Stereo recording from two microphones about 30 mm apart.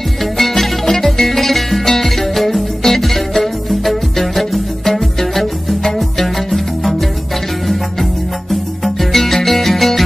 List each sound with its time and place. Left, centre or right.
0.4 s music: centre